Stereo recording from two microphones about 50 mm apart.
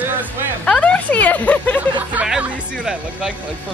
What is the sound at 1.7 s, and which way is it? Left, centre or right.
Speech, right.